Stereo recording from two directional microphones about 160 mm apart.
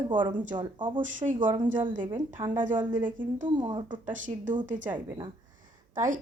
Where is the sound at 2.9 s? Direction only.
55° right (ahead or behind).